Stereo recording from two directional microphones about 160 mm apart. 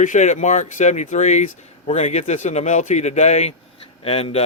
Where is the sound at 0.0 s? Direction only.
50° left (ahead or behind).